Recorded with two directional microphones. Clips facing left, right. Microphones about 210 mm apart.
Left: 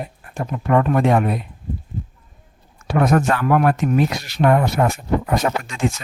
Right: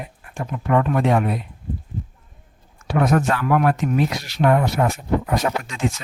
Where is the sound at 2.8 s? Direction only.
50° left (ahead or behind).